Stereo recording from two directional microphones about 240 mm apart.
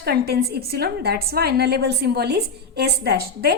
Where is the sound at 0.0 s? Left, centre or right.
Right.